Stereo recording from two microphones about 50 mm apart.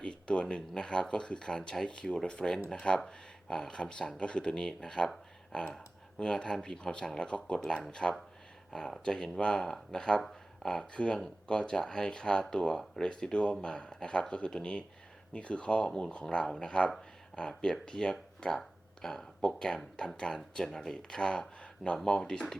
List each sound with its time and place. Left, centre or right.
0.0 s a sound: centre
0.7 s speech: centre
10.9 s speech: centre